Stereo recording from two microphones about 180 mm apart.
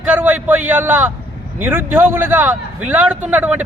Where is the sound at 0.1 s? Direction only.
10° right (ahead or behind).